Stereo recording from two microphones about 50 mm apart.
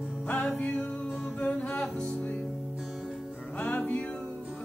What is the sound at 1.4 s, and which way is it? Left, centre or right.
Music, left.